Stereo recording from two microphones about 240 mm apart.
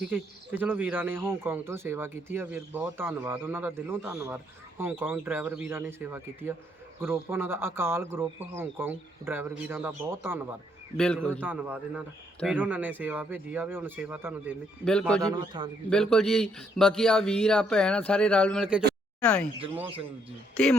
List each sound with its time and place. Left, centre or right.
0.1 s speech: centre
10.9 s speech: centre
11.3 s speech: centre
14.8 s speech: centre
15.2 s speech: centre
15.9 s speech: centre